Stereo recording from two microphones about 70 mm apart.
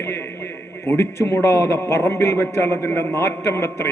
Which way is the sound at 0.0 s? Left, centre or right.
Left.